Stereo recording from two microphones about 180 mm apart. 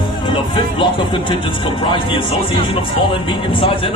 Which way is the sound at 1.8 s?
25° left (ahead or behind).